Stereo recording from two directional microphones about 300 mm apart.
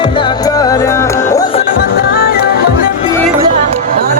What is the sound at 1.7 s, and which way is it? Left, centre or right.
Music, left.